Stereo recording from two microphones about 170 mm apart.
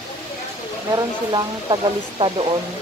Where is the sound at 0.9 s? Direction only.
25° right (ahead or behind).